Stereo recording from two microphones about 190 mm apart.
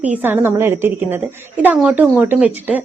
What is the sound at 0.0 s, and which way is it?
Speech, 10° right (ahead or behind).